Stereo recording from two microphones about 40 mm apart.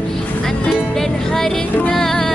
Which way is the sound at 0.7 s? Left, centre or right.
Centre.